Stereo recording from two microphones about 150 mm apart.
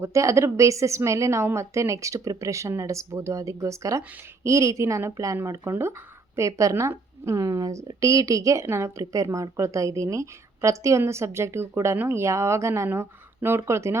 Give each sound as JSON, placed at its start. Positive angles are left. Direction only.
{"t": 0.0, "sound": "speech", "side_deg": -20}